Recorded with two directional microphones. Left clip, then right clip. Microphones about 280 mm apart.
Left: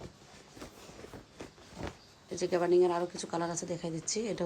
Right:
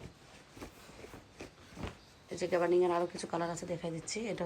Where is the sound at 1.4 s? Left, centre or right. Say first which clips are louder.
Left 1 dB; centre.